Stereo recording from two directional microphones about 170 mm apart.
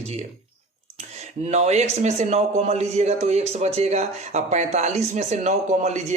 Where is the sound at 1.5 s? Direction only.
40° right (ahead or behind).